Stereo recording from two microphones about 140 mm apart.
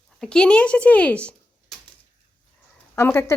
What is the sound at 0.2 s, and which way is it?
Speech, 5° left (ahead or behind).